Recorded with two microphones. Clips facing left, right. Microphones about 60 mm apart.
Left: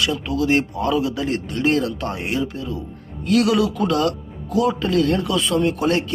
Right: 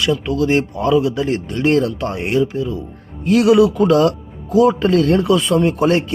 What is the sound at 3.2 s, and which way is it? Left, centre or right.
Speech, right.